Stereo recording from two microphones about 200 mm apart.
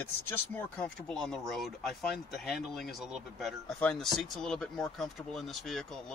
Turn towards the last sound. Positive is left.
turn(degrees=0)  # may be behind; listen again after turning